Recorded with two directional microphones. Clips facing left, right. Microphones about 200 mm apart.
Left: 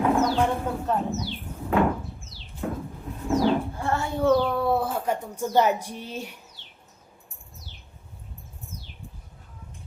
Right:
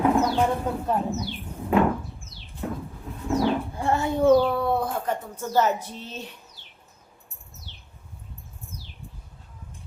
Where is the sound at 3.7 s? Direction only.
15° right (ahead or behind).